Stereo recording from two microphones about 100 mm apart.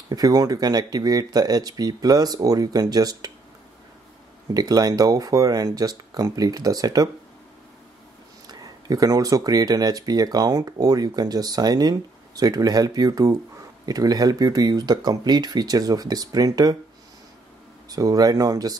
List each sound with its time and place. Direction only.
0.1 s speech: 40° right (ahead or behind)
4.6 s speech: 40° right (ahead or behind)
8.5 s speech: 40° right (ahead or behind)
17.8 s speech: 40° right (ahead or behind)